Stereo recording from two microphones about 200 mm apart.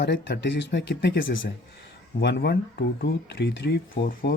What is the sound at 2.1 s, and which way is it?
Speech, 55° left (ahead or behind).